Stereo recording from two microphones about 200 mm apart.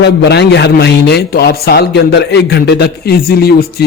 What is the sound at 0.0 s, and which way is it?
A man's voice, 55° left (ahead or behind).